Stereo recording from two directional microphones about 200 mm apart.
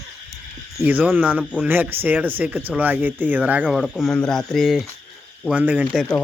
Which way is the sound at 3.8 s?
5° left (ahead or behind).